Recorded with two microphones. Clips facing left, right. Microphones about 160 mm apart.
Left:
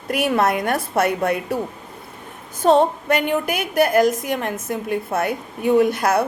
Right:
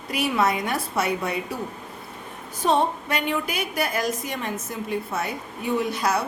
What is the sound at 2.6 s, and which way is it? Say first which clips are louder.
A woman's voice: left 7 dB; 55° left (ahead or behind).